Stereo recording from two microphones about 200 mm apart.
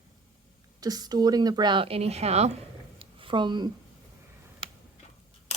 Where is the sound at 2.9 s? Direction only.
25° right (ahead or behind).